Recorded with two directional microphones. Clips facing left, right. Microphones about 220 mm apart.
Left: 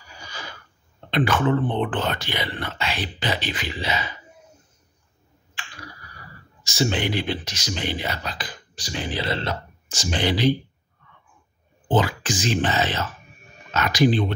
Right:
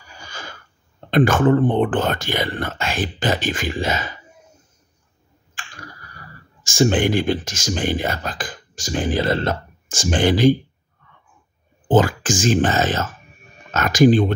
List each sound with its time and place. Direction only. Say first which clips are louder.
0.2 s a sound: right 2 dB; 50° right (ahead or behind)
1.1 s speech: right 6 dB; 45° right (ahead or behind)
5.5 s tick-tock: right 1 dB; 45° right (ahead or behind)
6.6 s speech: right 6 dB; 50° right (ahead or behind)
11.9 s speech: right 5 dB; 45° right (ahead or behind)